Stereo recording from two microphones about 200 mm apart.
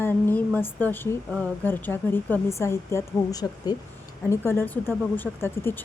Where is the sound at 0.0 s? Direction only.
10° left (ahead or behind).